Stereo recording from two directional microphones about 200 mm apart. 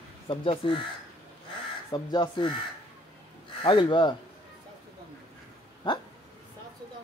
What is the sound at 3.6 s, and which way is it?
Speech, 25° left (ahead or behind).